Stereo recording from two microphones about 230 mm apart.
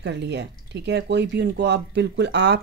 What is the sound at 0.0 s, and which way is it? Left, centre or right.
Speech, right.